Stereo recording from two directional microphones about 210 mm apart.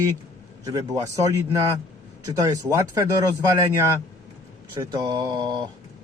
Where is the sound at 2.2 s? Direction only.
15° right (ahead or behind).